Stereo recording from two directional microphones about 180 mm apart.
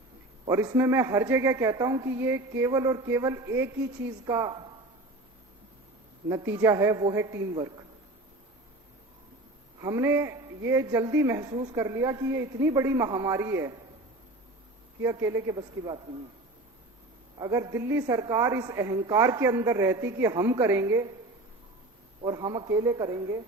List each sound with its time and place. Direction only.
0.4 s a man's voice: 20° right (ahead or behind)
6.2 s a man's voice: 15° right (ahead or behind)
9.8 s a man's voice: 15° right (ahead or behind)
15.0 s a man's voice: 15° right (ahead or behind)
17.3 s a man's voice: 20° right (ahead or behind)
22.2 s speech: 20° right (ahead or behind)